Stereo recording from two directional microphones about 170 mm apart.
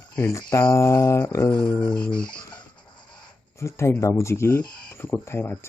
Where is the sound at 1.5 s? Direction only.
5° left (ahead or behind).